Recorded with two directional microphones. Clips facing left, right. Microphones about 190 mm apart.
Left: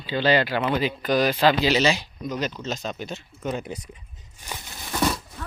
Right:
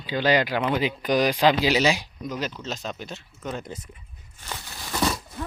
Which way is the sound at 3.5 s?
10° left (ahead or behind).